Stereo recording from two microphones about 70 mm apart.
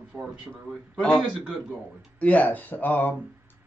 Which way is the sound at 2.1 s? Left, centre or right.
Left.